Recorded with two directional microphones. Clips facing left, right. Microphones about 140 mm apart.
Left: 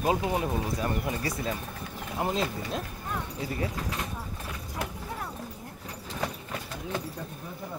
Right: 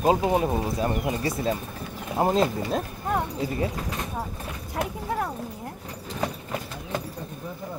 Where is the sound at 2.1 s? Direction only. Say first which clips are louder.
Right 7 dB; 45° right (ahead or behind).